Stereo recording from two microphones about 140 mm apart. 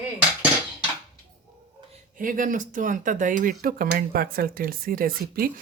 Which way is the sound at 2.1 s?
70° right (ahead or behind).